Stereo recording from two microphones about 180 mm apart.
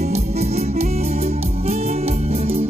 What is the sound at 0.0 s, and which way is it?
Music, 40° right (ahead or behind).